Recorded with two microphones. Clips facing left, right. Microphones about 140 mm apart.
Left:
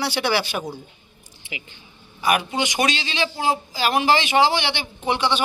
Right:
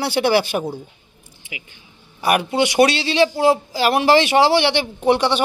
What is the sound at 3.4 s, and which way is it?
Speech, 65° right (ahead or behind).